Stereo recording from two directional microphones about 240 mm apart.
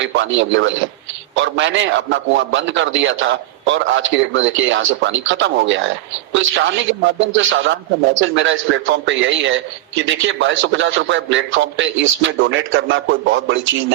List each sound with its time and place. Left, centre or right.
0.0 s a man's voice: right